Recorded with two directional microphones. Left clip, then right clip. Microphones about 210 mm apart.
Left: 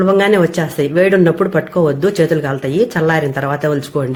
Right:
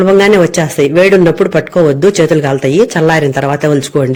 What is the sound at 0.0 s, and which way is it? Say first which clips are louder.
Speech: right 5 dB; 35° right (ahead or behind).